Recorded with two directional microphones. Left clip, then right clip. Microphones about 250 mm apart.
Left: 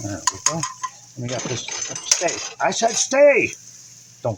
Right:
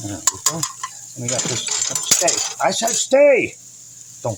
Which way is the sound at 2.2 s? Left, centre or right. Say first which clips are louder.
Right 3 dB; centre.